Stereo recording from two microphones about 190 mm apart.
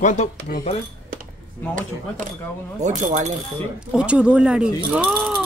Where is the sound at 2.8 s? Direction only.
40° right (ahead or behind).